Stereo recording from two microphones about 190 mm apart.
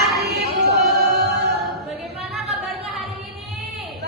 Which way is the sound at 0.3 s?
55° right (ahead or behind).